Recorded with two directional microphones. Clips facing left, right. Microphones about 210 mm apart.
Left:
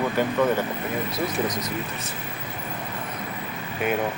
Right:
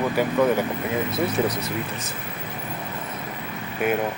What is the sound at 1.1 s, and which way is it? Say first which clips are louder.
Speech: right 3 dB; 30° right (ahead or behind).